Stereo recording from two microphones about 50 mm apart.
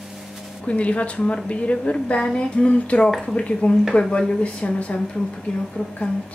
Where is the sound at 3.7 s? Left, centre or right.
Left.